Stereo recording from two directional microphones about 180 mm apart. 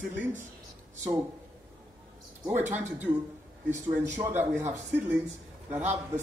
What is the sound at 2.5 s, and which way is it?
Speech, 40° right (ahead or behind).